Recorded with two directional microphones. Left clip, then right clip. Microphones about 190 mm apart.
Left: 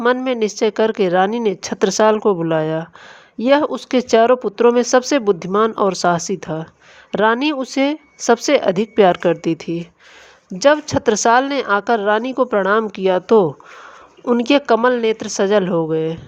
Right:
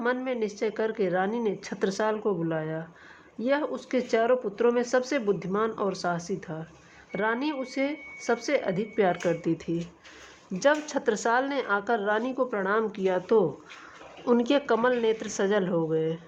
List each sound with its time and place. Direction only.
0.0 s speech: 40° left (ahead or behind)